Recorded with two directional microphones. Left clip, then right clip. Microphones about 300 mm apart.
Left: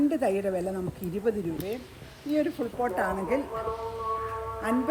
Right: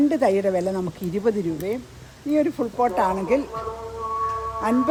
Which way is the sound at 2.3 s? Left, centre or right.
Right.